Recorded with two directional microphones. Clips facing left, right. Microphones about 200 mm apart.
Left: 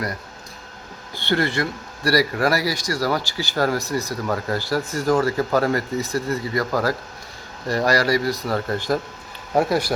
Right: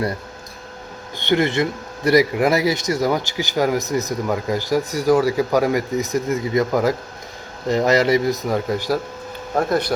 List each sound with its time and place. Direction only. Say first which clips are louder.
1.1 s speech: right 4 dB; 20° right (ahead or behind)
9.6 s speech: even; 10° left (ahead or behind)